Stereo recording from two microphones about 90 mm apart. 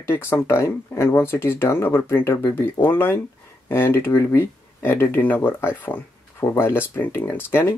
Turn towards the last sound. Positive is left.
turn(degrees=25)  # may be behind; listen again after turning